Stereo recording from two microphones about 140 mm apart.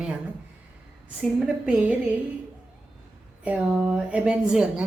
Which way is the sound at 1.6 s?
10° right (ahead or behind).